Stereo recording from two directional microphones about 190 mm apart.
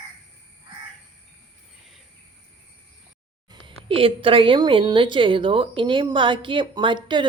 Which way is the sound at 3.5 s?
25° right (ahead or behind).